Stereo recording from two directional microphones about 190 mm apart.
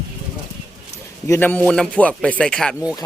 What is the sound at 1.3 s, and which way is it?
A man's voice, 10° left (ahead or behind).